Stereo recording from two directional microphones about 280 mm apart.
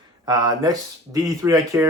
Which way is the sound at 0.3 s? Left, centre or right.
Centre.